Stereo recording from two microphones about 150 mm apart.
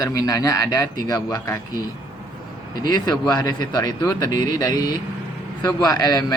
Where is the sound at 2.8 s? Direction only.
25° left (ahead or behind).